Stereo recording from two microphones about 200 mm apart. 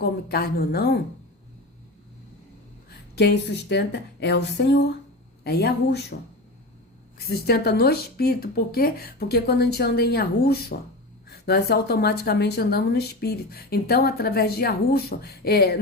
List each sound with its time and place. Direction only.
0.0 s a woman's voice: 50° left (ahead or behind)
3.2 s speech: 55° left (ahead or behind)
7.3 s a woman's voice: 50° left (ahead or behind)